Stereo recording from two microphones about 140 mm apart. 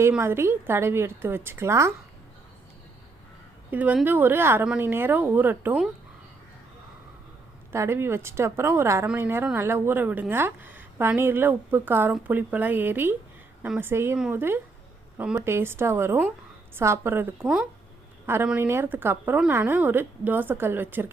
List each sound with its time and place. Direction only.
0.2 s speech: 20° right (ahead or behind)
3.7 s speech: 10° right (ahead or behind)
7.7 s a woman's voice: 20° right (ahead or behind)